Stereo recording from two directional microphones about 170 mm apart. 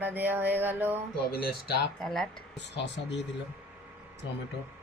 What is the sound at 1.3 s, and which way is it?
Speech, 65° left (ahead or behind).